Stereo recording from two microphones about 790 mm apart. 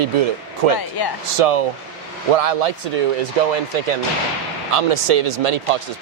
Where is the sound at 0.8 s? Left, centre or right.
Left.